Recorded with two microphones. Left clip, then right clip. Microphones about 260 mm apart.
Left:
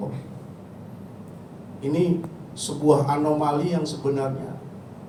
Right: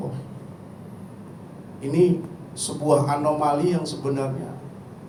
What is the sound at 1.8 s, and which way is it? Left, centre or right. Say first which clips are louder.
A man's voice: right 3 dB; right.